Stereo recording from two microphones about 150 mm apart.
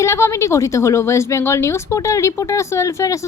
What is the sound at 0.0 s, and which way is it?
Speech, 20° left (ahead or behind).